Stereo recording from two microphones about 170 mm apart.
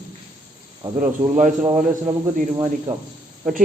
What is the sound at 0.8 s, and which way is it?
Speech, 15° right (ahead or behind).